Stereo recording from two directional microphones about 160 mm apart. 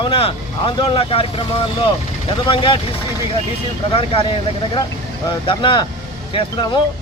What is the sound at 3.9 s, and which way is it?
Speech, 35° left (ahead or behind).